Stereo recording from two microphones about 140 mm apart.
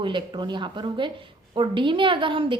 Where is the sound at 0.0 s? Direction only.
35° right (ahead or behind).